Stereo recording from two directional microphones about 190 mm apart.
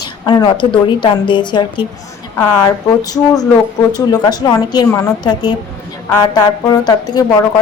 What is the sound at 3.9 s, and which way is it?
A woman's voice, 20° left (ahead or behind).